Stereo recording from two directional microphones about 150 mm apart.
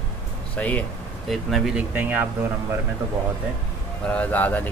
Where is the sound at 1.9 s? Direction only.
15° right (ahead or behind).